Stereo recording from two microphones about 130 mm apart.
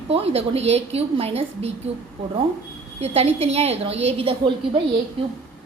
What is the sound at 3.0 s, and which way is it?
A woman's voice, 50° right (ahead or behind).